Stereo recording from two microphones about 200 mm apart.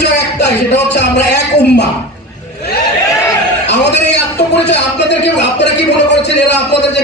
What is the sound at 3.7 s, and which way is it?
A man's voice, 60° left (ahead or behind).